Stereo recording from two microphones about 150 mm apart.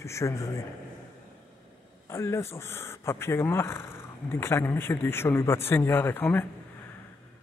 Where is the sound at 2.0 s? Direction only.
15° left (ahead or behind).